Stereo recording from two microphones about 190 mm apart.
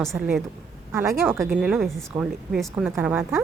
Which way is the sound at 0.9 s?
10° right (ahead or behind).